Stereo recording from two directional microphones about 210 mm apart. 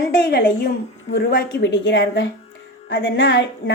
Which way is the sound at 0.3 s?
55° left (ahead or behind).